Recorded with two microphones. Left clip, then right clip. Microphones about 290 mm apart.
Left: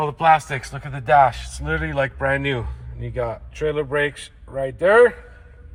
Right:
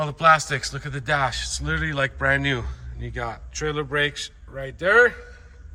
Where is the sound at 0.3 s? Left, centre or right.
Centre.